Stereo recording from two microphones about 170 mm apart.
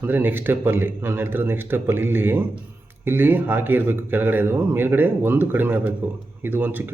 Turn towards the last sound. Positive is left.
turn(degrees=-10)  # may be behind; listen again after turning